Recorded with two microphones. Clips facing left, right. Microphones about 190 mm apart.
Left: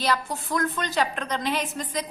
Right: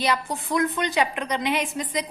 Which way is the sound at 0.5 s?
15° right (ahead or behind).